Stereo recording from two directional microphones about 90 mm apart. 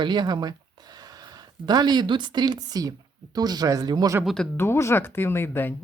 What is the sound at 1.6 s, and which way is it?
Speech, 50° right (ahead or behind).